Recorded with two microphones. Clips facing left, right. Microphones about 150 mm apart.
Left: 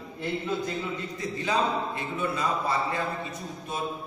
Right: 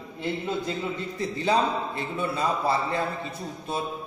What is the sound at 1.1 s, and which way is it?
A man's voice, 30° right (ahead or behind).